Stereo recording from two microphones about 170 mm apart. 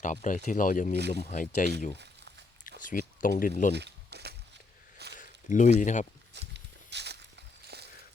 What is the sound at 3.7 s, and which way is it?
Walk, 80° right.